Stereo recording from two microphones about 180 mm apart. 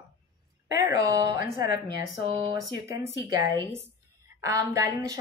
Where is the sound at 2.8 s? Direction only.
15° right (ahead or behind).